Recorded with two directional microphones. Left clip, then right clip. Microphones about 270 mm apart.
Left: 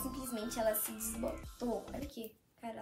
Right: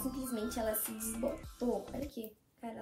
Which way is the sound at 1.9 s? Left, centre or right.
Centre.